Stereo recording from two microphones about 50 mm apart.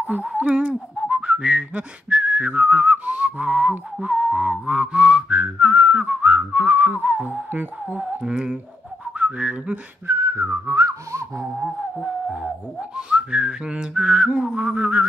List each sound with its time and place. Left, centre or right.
0.0 s speech: right
1.0 s whistling: centre; by 7.6 s right
7.9 s humming: right
8.2 s a sound: centre
9.2 s speech: right
10.0 s whistling: right
10.7 s whistling: right
12.9 s whistling: centre